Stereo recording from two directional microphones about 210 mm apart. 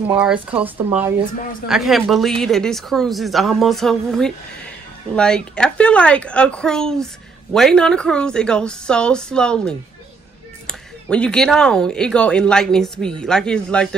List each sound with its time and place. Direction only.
0.0 s speech: 5° right (ahead or behind)